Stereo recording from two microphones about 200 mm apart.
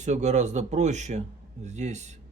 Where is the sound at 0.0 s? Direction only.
35° right (ahead or behind).